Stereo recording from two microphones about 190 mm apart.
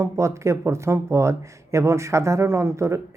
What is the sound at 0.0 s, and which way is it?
Speech, 15° right (ahead or behind).